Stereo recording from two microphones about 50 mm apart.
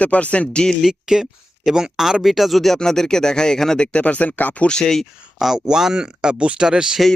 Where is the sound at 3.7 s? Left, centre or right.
Left.